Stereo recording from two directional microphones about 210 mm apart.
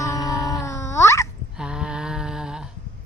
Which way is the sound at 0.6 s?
15° left (ahead or behind).